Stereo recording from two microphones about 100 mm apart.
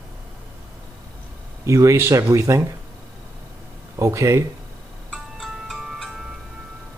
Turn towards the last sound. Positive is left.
turn(degrees=0)  # may be behind; listen again after turning